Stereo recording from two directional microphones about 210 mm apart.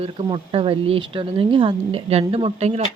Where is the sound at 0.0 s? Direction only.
25° right (ahead or behind).